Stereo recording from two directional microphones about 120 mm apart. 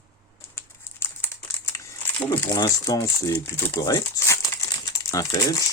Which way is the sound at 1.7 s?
25° left (ahead or behind).